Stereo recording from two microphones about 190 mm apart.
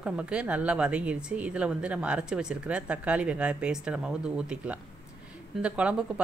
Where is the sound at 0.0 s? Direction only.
5° right (ahead or behind).